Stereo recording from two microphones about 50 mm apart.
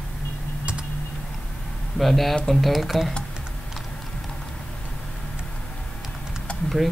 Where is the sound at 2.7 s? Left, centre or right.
Centre.